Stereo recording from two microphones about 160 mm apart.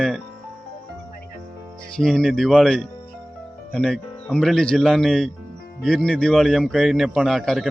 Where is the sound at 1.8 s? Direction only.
5° left (ahead or behind).